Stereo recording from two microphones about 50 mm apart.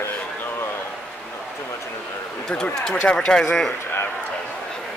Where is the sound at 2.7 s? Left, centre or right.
Centre.